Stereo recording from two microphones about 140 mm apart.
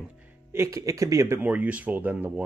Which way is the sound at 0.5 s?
20° right (ahead or behind).